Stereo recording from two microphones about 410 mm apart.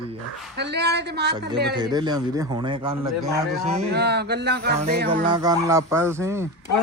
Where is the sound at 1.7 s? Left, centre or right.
Centre.